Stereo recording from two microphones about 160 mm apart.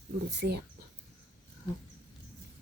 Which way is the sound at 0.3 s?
90° right.